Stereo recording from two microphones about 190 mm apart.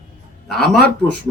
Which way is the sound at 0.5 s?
Centre (ahead or behind).